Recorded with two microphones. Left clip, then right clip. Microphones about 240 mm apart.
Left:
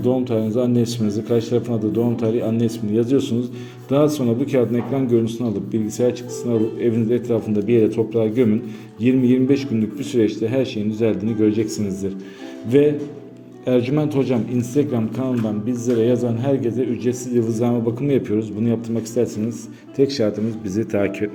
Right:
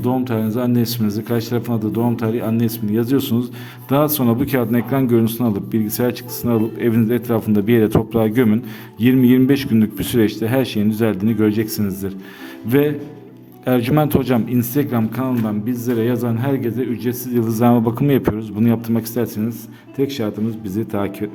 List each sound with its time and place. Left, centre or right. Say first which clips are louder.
0.0 s a man's voice: left 1 dB; right